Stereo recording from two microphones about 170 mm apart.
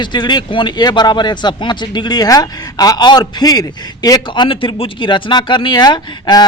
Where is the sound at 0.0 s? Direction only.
25° left (ahead or behind).